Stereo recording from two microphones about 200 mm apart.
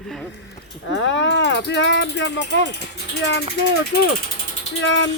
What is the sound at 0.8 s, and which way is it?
Speech, 65° left (ahead or behind).